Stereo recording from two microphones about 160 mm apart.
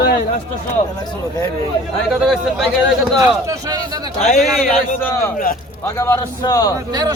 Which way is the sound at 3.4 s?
20° right (ahead or behind).